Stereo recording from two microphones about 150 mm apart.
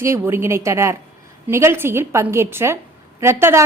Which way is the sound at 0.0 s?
20° right (ahead or behind).